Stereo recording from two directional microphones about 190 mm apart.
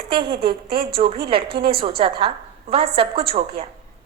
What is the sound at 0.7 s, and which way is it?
Speech, 55° right (ahead or behind).